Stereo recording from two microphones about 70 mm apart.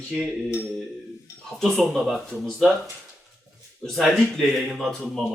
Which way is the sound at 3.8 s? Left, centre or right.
Centre.